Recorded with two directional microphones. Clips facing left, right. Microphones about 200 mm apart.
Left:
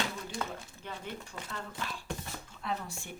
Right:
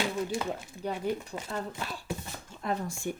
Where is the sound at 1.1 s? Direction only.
40° right (ahead or behind).